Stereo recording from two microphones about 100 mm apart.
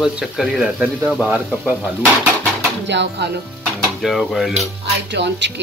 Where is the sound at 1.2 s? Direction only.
15° right (ahead or behind).